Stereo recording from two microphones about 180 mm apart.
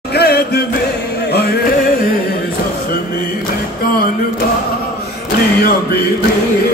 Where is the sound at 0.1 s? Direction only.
60° left (ahead or behind).